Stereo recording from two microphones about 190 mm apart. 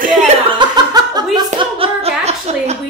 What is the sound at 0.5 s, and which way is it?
Snicker, 20° right (ahead or behind).